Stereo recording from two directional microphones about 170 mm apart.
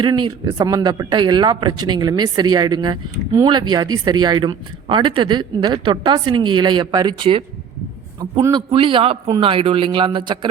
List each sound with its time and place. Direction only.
0.0 s a man's voice: 25° right (ahead or behind)